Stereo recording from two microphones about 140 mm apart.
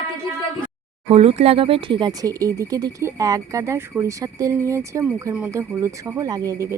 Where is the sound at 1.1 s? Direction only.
45° right (ahead or behind); by 6.7 s 20° right (ahead or behind).